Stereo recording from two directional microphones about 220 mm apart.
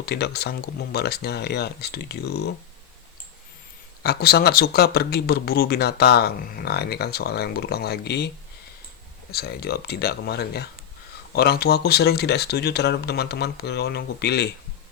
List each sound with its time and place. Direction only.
0.0 s speech: 50° left (ahead or behind)
4.0 s speech: 45° left (ahead or behind)
9.3 s speech: 45° left (ahead or behind)